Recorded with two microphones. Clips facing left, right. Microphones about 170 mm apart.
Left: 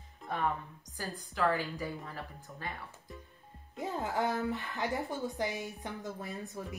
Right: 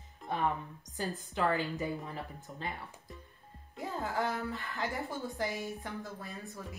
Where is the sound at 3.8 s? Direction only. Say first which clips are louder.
Left 1 dB; 20° left (ahead or behind).